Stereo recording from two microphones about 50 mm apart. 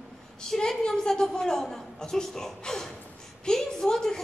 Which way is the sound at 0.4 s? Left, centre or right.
Centre.